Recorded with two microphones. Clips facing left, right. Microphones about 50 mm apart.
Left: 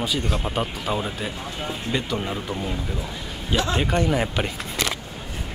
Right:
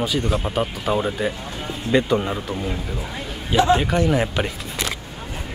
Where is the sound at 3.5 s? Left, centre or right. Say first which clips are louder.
Right 7 dB; centre.